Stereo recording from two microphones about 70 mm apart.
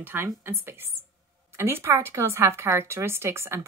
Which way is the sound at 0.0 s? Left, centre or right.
Right.